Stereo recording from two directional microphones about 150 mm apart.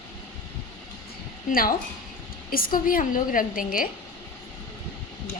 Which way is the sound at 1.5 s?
70° left (ahead or behind).